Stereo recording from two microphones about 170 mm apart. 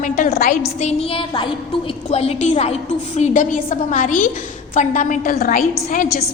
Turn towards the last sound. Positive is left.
turn(degrees=50)  # may be behind; listen again after turning